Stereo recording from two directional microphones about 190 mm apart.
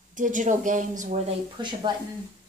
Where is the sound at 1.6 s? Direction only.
25° right (ahead or behind).